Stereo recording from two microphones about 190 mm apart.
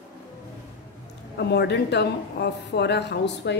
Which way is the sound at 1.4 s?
60° left (ahead or behind).